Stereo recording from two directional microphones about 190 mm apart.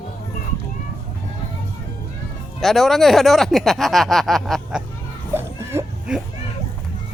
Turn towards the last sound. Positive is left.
turn(degrees=-15)  # may be behind; listen again after turning